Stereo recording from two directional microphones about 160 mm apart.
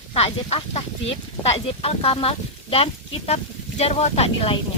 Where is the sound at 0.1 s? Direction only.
40° left (ahead or behind).